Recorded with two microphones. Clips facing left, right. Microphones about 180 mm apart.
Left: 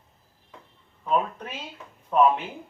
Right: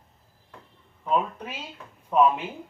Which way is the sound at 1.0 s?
5° right (ahead or behind).